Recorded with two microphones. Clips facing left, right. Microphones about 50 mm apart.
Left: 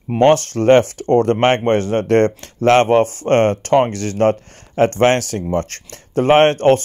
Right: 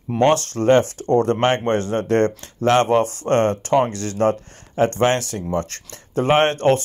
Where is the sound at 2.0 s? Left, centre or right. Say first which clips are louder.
Left 4 dB; left.